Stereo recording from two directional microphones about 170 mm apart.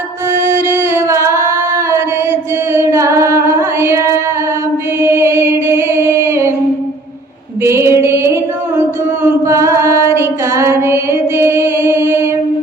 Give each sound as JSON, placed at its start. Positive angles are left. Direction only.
{"t": 0.3, "sound": "singing", "side_deg": -15}
{"t": 2.7, "sound": "child singing", "side_deg": -15}
{"t": 4.9, "sound": "singing", "side_deg": -15}
{"t": 7.6, "sound": "music", "side_deg": -15}
{"t": 9.5, "sound": "music", "side_deg": -15}